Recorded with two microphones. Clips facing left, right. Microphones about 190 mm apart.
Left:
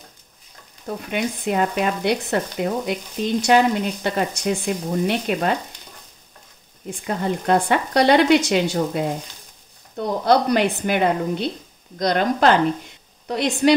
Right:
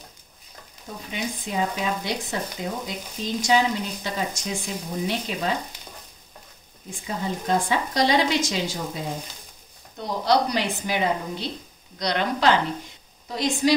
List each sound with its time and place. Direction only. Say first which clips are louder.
0.8 s speech: left 7 dB; 65° left (ahead or behind)
7.1 s speech: left 5 dB; 65° left (ahead or behind)
10.2 s speech: left 5 dB; 55° left (ahead or behind)
13.3 s speech: left 4 dB; 60° left (ahead or behind)